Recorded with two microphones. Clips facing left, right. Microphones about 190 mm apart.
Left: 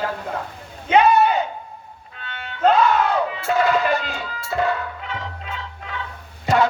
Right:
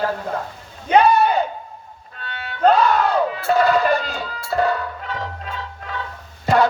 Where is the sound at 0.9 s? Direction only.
35° right (ahead or behind).